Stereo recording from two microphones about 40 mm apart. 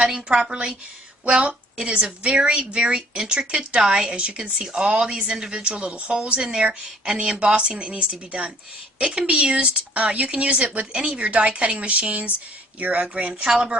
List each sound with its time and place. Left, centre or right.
0.3 s speech: right
4.2 s a woman's voice: right